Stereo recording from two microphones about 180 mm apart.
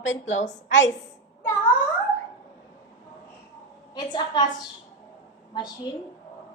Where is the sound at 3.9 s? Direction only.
25° left (ahead or behind).